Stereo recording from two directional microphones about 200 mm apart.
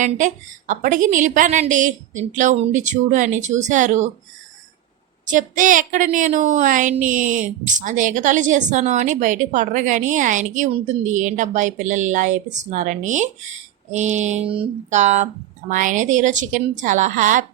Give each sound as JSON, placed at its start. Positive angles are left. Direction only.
{"t": 0.0, "sound": "a woman's voice", "side_deg": -40}
{"t": 5.2, "sound": "a woman's voice", "side_deg": -40}